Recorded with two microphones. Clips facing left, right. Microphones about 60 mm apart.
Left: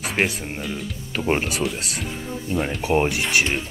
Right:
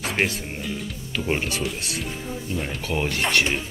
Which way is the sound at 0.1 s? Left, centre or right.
Centre.